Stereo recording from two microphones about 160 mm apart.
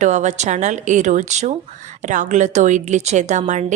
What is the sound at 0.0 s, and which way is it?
Speech, 45° right (ahead or behind).